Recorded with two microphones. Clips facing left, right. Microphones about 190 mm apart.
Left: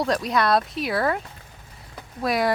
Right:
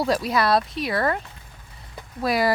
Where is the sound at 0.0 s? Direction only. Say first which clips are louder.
Right 1 dB; 5° right (ahead or behind).